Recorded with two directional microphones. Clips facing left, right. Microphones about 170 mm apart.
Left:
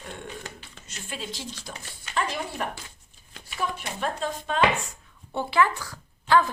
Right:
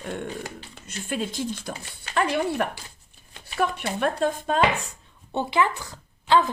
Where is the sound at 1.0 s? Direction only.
50° right (ahead or behind).